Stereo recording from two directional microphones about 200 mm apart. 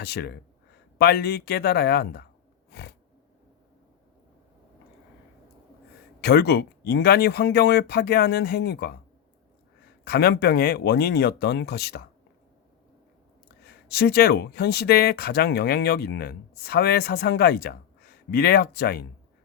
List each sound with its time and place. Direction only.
0.0 s speech: 55° left (ahead or behind)
2.7 s a sound: 60° left (ahead or behind)
6.2 s speech: 55° left (ahead or behind)
10.0 s speech: 50° left (ahead or behind)
13.7 s speech: 50° left (ahead or behind)